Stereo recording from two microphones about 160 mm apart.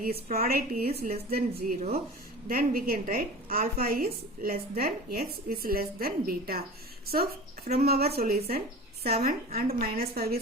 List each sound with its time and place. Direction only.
0.3 s a woman's voice: 70° right (ahead or behind)